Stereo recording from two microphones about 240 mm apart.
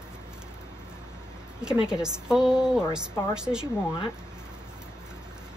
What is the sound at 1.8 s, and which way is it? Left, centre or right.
A woman's voice, centre.